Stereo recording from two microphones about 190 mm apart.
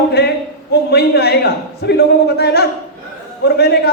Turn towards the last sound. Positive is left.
turn(degrees=60)  # may be behind; listen again after turning